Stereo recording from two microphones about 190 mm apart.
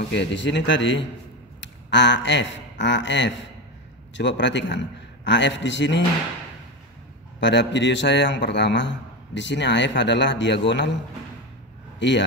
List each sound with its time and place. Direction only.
0.1 s a man's voice: 65° left (ahead or behind)
7.3 s a man's voice: 70° left (ahead or behind)
12.0 s a man's voice: 70° left (ahead or behind)